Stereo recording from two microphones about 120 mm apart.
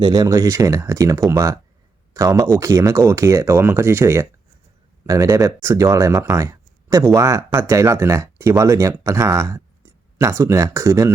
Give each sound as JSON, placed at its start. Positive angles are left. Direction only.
{"t": 0.0, "sound": "speech", "side_deg": -30}